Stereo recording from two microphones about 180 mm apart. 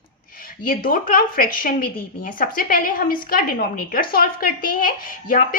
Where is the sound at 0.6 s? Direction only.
50° left (ahead or behind).